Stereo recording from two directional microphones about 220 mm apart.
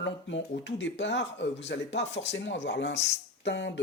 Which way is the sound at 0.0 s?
55° left (ahead or behind).